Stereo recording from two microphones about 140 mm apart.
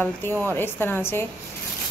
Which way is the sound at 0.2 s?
15° left (ahead or behind).